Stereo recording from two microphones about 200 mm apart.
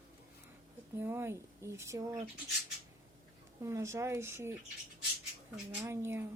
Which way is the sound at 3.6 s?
15° right (ahead or behind).